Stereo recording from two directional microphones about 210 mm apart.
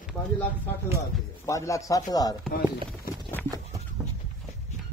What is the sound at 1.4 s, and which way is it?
Speech, 15° left (ahead or behind).